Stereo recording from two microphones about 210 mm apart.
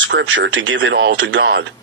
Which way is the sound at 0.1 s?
60° right (ahead or behind).